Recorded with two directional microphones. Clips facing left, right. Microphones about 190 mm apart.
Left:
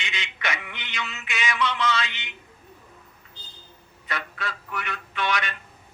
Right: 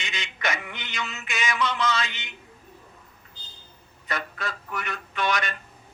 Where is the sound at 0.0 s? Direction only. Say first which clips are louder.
Right 2 dB; 45° right (ahead or behind).